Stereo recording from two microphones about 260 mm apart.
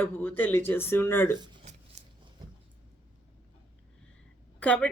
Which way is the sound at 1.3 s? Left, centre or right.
Right.